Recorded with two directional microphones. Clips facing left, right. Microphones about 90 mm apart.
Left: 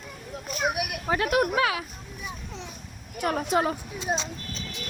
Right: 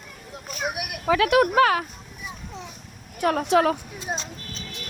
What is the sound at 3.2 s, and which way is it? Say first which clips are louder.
Speech: right 5 dB; 60° right (ahead or behind).